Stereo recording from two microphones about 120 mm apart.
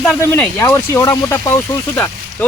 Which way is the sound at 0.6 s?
20° left (ahead or behind).